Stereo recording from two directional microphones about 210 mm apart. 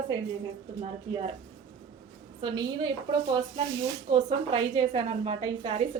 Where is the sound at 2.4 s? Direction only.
25° right (ahead or behind).